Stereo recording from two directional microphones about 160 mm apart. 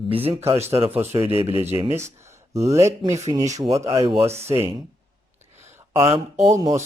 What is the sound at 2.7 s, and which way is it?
Speech, 20° right (ahead or behind).